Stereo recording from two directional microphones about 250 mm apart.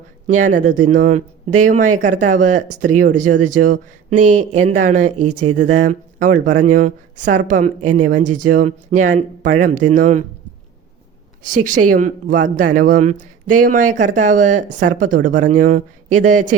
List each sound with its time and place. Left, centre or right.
0.3 s speech: right
11.4 s speech: right